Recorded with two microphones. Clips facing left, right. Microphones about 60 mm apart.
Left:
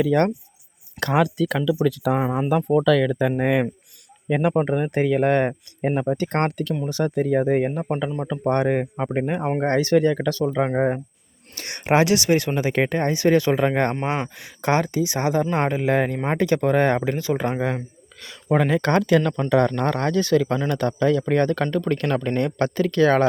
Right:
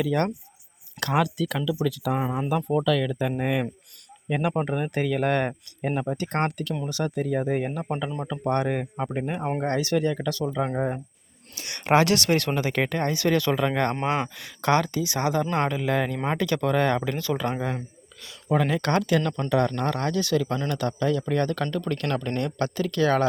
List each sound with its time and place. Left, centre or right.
0.0 s speech: left
2.2 s speech: left
2.6 s speech: left
4.3 s speech: left
11.8 s speech: centre
18.2 s speech: left